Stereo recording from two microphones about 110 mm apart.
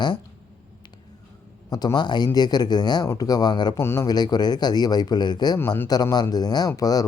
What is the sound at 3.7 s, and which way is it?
Speech, 25° left (ahead or behind).